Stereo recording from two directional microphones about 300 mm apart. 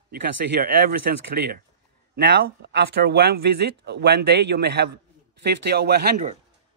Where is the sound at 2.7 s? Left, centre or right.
Right.